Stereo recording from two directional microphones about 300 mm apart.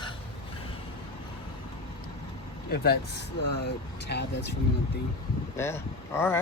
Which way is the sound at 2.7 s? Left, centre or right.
Left.